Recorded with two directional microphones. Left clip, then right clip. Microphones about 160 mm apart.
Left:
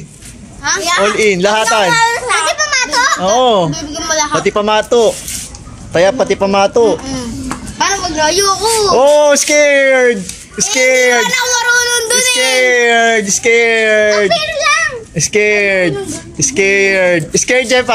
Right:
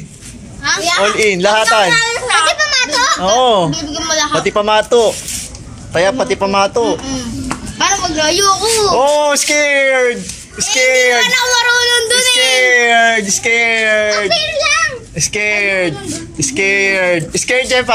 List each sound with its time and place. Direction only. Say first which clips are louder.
0.7 s a child's voice: left 1 dB; 15° left (ahead or behind)
5.9 s a man's voice: left 3 dB; 30° left (ahead or behind)
6.9 s a child's voice: left 2 dB; 20° left (ahead or behind)
7.8 s a sound: left 1 dB; 10° left (ahead or behind)
8.7 s a woman's voice: left 1 dB; 20° left (ahead or behind)
9.0 s a man's voice: left 4 dB; 30° left (ahead or behind)
11.1 s speech: right 1 dB; 15° left (ahead or behind); by 14.3 s 35° left (ahead or behind)
14.3 s music: left 1 dB; 10° left (ahead or behind)
15.3 s a man's voice: left 3 dB; 35° left (ahead or behind)